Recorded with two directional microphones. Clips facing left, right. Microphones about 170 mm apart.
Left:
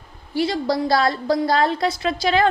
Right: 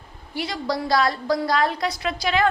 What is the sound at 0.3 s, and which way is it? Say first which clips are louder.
A woman's voice: left 6 dB; 30° left (ahead or behind).